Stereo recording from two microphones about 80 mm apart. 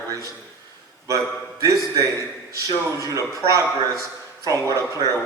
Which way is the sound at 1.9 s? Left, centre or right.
Right.